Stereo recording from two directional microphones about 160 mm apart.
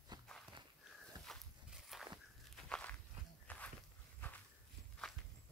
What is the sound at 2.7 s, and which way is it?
Walk, 10° left (ahead or behind).